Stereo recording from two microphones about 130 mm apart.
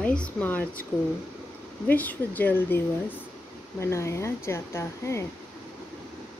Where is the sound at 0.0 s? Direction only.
10° left (ahead or behind).